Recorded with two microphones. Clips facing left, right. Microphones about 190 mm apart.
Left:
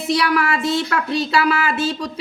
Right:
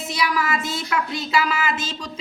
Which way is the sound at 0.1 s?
70° left (ahead or behind).